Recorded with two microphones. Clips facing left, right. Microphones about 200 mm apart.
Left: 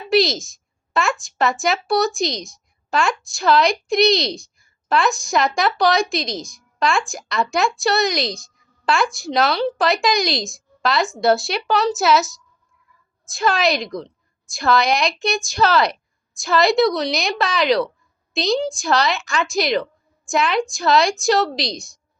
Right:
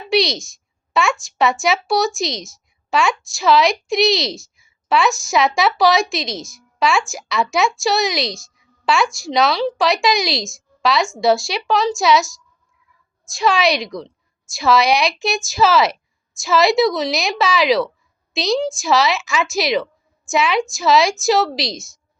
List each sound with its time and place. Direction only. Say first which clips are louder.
0.1 s a woman's voice: left 1 dB; centre (ahead or behind)